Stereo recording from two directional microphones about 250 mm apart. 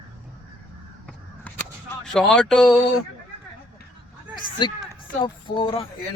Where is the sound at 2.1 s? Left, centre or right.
Centre.